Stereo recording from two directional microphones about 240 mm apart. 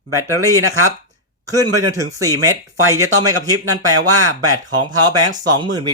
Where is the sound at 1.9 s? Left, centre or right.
Centre.